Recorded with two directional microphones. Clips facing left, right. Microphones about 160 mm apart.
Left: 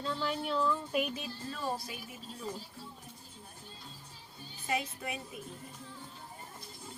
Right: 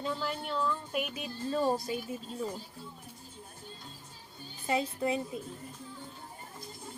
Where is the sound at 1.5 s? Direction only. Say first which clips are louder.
Right 9 dB; 30° right (ahead or behind).